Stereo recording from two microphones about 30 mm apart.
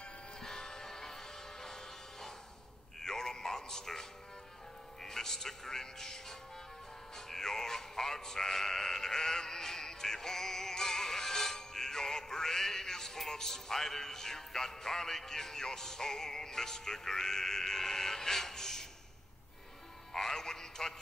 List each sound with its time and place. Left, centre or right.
0.4 s music: centre
5.0 s a man's voice: centre
20.1 s music: centre